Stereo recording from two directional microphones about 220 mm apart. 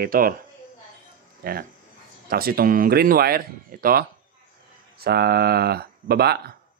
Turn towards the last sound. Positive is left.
turn(degrees=-45)  # may be behind; listen again after turning